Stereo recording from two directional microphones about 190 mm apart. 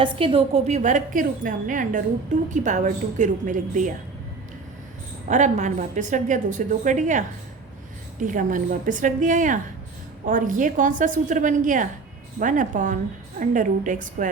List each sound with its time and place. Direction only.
0.0 s a woman's voice: 30° right (ahead or behind)
5.3 s a woman's voice: 40° right (ahead or behind)